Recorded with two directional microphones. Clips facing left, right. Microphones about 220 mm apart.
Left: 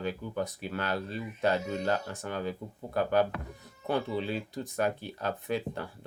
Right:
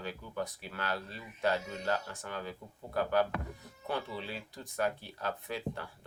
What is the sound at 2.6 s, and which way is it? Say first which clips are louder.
Speech: left 8 dB; 30° left (ahead or behind).